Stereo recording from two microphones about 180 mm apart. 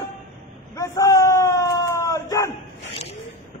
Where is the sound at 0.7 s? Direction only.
20° left (ahead or behind).